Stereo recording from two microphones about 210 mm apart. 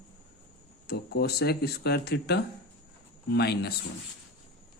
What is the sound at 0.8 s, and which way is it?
Speech, 50° left (ahead or behind).